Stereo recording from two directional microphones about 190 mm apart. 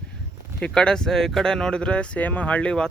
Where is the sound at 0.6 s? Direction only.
5° left (ahead or behind).